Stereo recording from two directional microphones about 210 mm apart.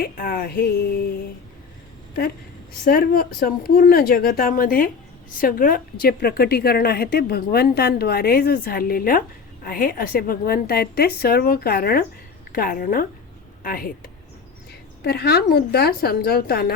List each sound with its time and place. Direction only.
0.0 s a woman's voice: 45° left (ahead or behind)
2.8 s a woman's voice: 45° left (ahead or behind)